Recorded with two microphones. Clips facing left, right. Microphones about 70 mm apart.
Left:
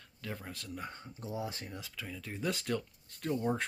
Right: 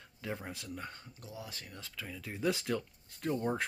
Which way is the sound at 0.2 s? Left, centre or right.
Centre.